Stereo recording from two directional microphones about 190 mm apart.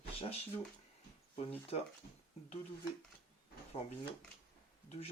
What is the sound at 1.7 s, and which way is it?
Speech, 35° left (ahead or behind).